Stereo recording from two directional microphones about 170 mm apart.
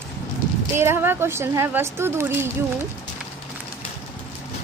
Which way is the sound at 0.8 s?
15° right (ahead or behind).